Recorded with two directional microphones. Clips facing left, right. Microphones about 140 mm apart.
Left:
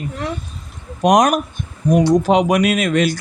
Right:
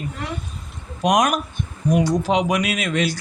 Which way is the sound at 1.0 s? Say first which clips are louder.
Left 5 dB; 40° left (ahead or behind).